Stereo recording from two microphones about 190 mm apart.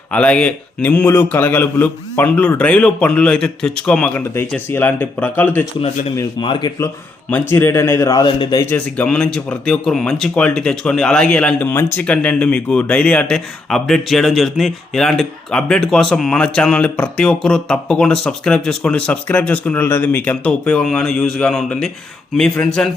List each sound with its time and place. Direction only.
0.1 s a man's voice: 5° left (ahead or behind)
6.4 s speech: 25° left (ahead or behind)
7.3 s speech: 10° left (ahead or behind)